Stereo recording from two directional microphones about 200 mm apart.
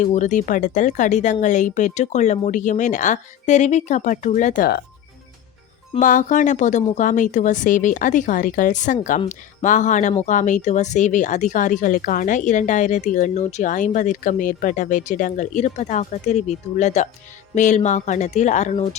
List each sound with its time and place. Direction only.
0.0 s speech: 40° left (ahead or behind)
6.0 s speech: 40° left (ahead or behind)